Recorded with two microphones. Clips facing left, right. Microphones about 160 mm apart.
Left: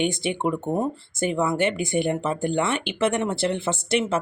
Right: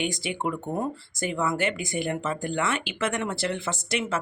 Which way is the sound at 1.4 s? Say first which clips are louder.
Left 3 dB; 25° left (ahead or behind).